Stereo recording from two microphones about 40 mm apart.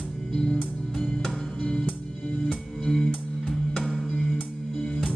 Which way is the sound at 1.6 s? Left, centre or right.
Left.